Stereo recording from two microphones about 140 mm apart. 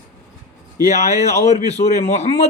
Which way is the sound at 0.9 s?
55° left (ahead or behind).